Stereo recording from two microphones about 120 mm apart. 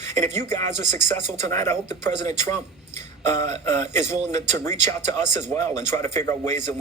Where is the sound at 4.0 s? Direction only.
75° right (ahead or behind).